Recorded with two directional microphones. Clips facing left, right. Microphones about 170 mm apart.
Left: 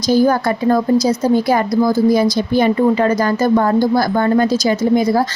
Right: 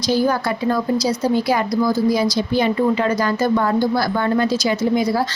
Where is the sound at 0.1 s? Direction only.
45° left (ahead or behind).